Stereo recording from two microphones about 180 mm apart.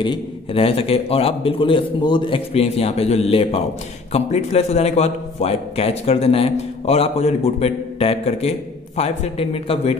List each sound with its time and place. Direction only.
0.0 s a man's voice: 30° left (ahead or behind)